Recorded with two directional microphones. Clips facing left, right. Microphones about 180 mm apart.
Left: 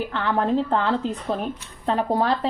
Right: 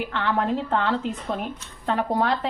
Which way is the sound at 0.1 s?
30° left (ahead or behind).